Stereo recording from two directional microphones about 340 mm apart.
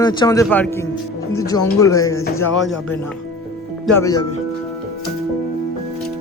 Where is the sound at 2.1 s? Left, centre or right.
Left.